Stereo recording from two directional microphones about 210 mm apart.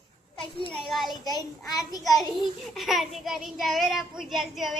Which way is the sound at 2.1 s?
Centre (ahead or behind).